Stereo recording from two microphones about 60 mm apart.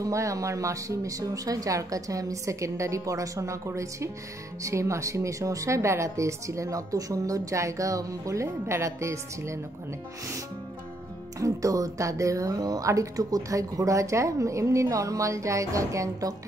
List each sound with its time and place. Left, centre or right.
0.0 s speech: right
11.3 s speech: right